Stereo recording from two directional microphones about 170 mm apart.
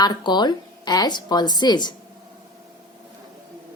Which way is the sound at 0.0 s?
25° left (ahead or behind).